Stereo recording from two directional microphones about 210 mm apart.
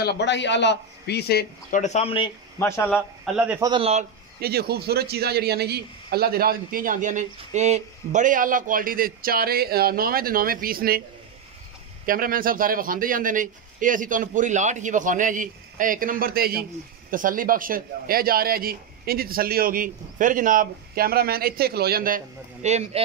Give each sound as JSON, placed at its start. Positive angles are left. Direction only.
{"t": 0.0, "sound": "a man's voice", "side_deg": 55}
{"t": 2.6, "sound": "speech", "side_deg": 10}
{"t": 3.3, "sound": "a man's voice", "side_deg": -10}
{"t": 3.7, "sound": "speech", "side_deg": -30}
{"t": 4.4, "sound": "a man's voice", "side_deg": -50}
{"t": 12.1, "sound": "a man's voice", "side_deg": -40}